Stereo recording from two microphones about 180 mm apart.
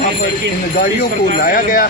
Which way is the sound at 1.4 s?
55° left (ahead or behind).